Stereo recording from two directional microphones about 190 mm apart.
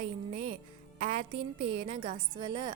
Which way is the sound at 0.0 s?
30° right (ahead or behind).